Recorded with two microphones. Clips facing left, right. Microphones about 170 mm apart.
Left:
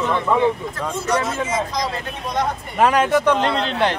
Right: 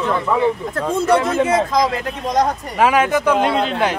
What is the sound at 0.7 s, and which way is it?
Speech, 55° right (ahead or behind).